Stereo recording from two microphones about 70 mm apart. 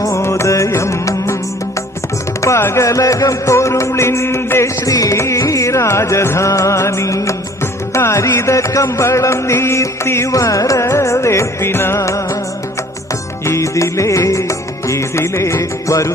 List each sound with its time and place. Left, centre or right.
0.0 s music: left
2.6 s music: left
4.9 s music: left
13.4 s music: left